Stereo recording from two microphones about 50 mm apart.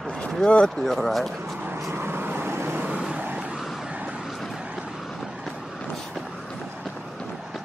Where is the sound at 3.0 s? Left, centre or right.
Centre.